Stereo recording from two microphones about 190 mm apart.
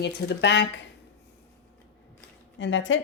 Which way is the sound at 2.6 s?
80° left.